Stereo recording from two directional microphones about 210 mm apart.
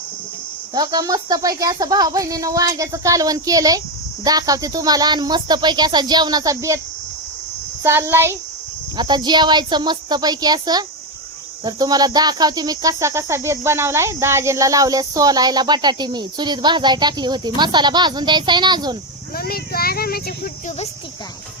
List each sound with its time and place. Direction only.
0.7 s speech: 20° right (ahead or behind)
7.9 s speech: 10° right (ahead or behind)
19.4 s speech: 45° left (ahead or behind)